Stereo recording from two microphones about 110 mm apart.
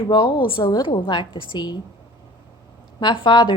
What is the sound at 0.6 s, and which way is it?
A woman's voice, 35° left (ahead or behind).